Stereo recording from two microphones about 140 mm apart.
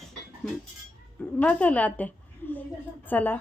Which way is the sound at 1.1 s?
10° left (ahead or behind).